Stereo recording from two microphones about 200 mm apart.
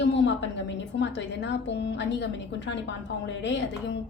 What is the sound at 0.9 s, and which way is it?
A woman's voice, 60° left (ahead or behind).